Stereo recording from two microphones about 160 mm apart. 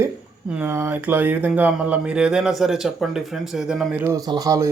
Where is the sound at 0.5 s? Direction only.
15° right (ahead or behind).